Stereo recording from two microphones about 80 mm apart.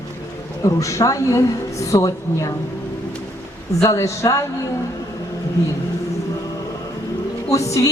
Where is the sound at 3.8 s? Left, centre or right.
Left.